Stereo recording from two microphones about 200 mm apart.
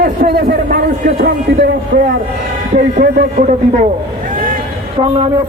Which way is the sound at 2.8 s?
40° right (ahead or behind).